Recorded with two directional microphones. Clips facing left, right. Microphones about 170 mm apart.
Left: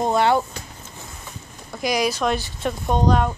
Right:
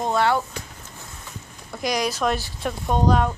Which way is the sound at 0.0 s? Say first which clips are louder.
Left 3 dB; 20° left (ahead or behind).